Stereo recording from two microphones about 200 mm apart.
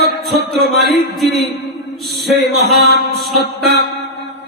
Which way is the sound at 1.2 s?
Centre (ahead or behind).